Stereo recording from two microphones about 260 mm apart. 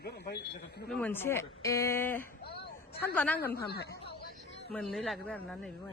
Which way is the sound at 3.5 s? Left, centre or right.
Left.